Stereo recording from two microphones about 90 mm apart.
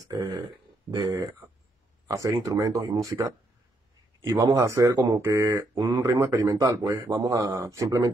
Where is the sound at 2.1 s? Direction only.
40° right (ahead or behind).